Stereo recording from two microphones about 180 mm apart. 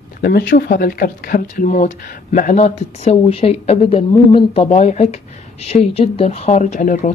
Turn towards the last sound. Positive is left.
turn(degrees=45)  # may be behind; listen again after turning